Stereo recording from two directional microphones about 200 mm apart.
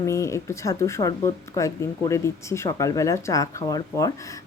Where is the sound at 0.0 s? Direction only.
15° left (ahead or behind).